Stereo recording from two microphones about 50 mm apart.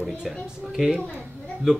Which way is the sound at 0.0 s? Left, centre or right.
Centre.